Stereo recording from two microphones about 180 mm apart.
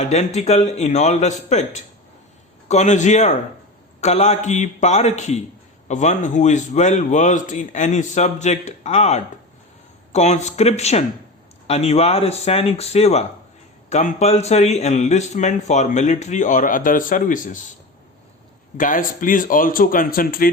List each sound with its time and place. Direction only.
0.0 s speech: 40° left (ahead or behind)
18.8 s speech: 50° left (ahead or behind)